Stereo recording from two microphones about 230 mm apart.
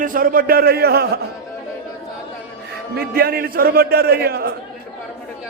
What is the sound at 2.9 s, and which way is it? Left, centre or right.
A man's voice, right.